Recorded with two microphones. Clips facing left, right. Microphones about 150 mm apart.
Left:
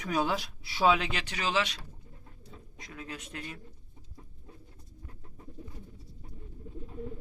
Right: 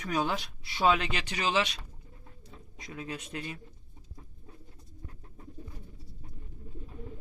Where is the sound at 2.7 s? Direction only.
5° right (ahead or behind).